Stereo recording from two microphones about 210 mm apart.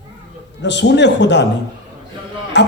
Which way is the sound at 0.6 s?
55° left (ahead or behind).